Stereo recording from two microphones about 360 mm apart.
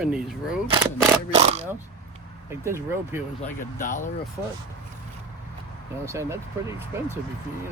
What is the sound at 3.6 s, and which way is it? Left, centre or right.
Speech, left.